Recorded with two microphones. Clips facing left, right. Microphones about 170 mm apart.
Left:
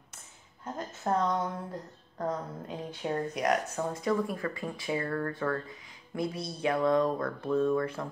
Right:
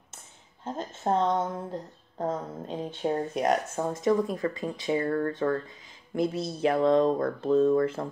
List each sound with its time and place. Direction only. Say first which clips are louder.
0.7 s a woman's voice: right 3 dB; 25° right (ahead or behind)